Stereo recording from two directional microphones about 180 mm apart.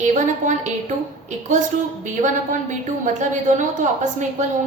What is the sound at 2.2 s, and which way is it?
A woman's voice, 45° right (ahead or behind).